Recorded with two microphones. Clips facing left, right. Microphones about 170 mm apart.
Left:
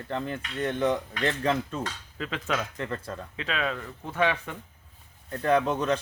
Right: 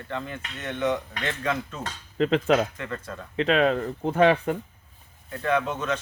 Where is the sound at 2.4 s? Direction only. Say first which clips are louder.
Right 5 dB; 40° right (ahead or behind).